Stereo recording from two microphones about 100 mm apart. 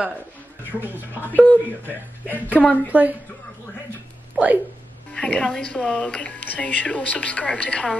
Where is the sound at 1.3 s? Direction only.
15° left (ahead or behind).